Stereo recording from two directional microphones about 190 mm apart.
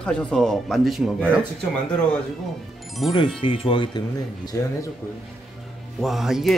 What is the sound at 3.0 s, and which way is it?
Speech, centre (ahead or behind).